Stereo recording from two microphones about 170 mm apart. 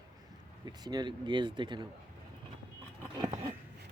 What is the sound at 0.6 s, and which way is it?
Speech, 25° right (ahead or behind).